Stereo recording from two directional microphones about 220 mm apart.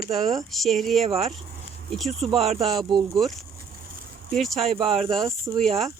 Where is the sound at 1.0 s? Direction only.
30° right (ahead or behind).